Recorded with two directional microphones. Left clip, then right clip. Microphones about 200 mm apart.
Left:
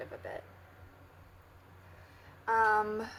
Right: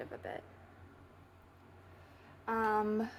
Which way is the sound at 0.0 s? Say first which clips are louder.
Left 1 dB; 30° right (ahead or behind).